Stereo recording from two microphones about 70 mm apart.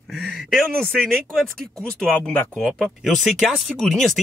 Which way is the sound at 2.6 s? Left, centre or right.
Centre.